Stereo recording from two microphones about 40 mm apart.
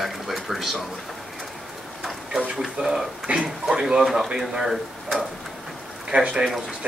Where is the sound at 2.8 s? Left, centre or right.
Centre.